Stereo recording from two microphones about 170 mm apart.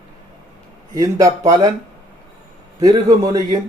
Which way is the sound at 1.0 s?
20° right (ahead or behind).